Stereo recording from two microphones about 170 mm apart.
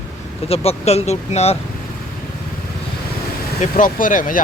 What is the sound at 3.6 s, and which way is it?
Speech, 50° left (ahead or behind).